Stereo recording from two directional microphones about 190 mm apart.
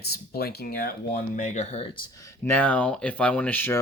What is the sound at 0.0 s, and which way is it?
Speech, 55° left (ahead or behind).